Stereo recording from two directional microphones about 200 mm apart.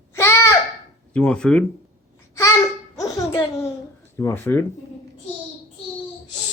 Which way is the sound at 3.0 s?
15° left (ahead or behind).